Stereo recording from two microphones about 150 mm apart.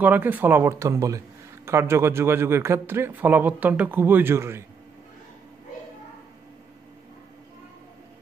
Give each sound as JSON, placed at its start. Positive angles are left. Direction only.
{"t": 0.0, "sound": "a man's voice", "side_deg": -10}